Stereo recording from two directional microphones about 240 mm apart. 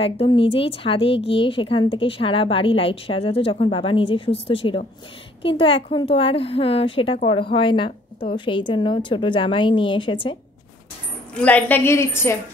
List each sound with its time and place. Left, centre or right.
0.0 s a woman's voice: left
11.3 s a woman's voice: centre